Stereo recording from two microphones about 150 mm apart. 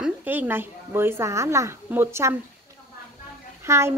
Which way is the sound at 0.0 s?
10° right (ahead or behind).